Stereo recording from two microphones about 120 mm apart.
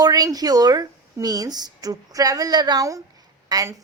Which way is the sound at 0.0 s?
30° right (ahead or behind).